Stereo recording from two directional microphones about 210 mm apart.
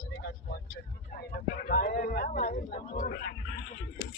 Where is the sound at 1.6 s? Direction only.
40° left (ahead or behind).